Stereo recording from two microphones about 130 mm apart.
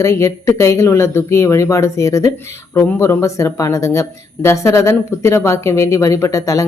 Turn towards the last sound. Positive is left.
turn(degrees=25)  # may be behind; listen again after turning